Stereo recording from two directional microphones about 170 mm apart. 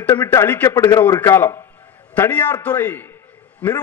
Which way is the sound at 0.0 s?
15° left (ahead or behind).